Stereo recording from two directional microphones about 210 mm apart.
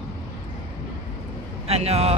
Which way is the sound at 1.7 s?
30° right (ahead or behind).